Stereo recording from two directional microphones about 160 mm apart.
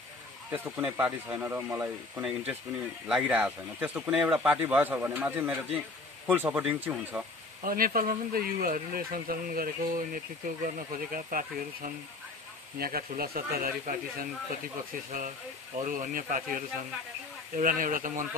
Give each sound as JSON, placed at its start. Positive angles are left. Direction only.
{"t": 0.5, "sound": "speech", "side_deg": -10}
{"t": 7.6, "sound": "speech", "side_deg": -65}
{"t": 15.1, "sound": "speech", "side_deg": -55}
{"t": 17.6, "sound": "speech", "side_deg": -55}